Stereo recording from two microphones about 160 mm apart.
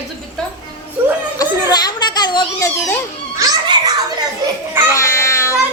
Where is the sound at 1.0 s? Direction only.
15° right (ahead or behind).